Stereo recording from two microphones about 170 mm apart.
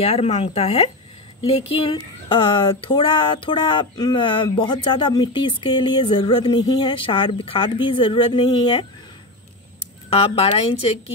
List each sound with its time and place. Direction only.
0.0 s a woman's voice: 35° left (ahead or behind)
10.0 s a woman's voice: 35° left (ahead or behind)